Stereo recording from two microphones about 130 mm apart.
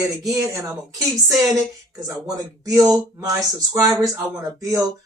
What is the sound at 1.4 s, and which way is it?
Speech, 25° right (ahead or behind).